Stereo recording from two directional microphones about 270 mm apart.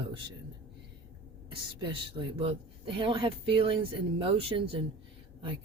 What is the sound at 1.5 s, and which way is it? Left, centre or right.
Speech, centre.